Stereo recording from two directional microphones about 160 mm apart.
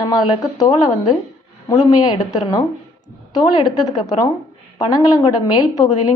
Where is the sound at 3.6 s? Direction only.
25° left (ahead or behind).